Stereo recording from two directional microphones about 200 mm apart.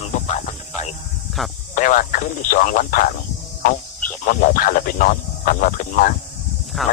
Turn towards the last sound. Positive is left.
turn(degrees=0)  # may be behind; listen again after turning